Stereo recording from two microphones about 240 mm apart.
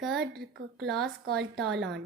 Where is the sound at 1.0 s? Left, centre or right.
Right.